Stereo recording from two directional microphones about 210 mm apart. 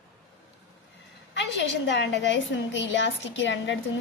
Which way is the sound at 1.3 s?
55° left (ahead or behind).